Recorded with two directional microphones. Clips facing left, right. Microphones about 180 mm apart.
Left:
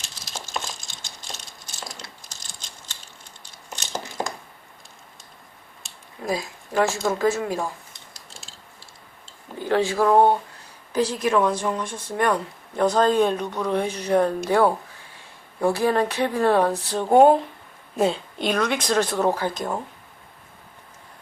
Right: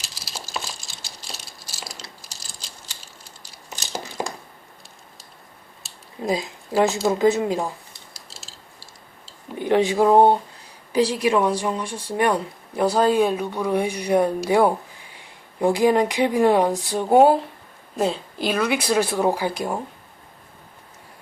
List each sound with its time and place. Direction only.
0.1 s a sound: 35° right (ahead or behind)
1.9 s typing: 35° right (ahead or behind)
6.2 s speech: 20° right (ahead or behind)
9.6 s speech: 20° right (ahead or behind)